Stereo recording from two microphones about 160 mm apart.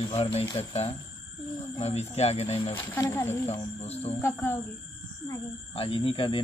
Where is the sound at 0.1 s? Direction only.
40° left (ahead or behind).